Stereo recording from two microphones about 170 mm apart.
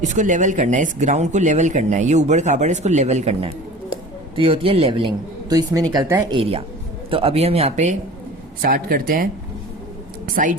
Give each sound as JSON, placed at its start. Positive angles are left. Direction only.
{"t": 0.0, "sound": "speech", "side_deg": -45}
{"t": 7.1, "sound": "speech", "side_deg": -35}
{"t": 8.6, "sound": "speech", "side_deg": -60}
{"t": 10.4, "sound": "speech", "side_deg": -50}